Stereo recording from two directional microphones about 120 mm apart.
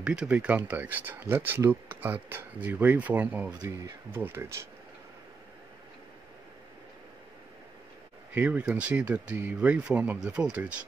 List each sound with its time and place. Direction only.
0.0 s speech: 5° right (ahead or behind)
8.3 s speech: 15° right (ahead or behind)